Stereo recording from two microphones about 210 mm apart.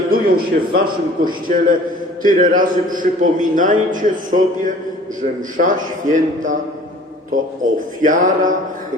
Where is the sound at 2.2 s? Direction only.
40° right (ahead or behind).